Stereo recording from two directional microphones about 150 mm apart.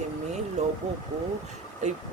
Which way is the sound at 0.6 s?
50° right (ahead or behind).